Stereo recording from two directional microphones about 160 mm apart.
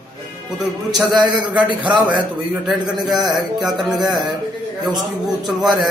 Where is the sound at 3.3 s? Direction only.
Centre (ahead or behind).